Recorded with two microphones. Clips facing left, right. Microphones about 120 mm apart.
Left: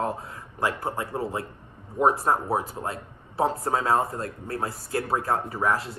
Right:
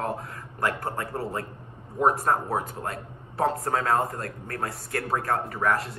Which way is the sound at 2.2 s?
5° left (ahead or behind).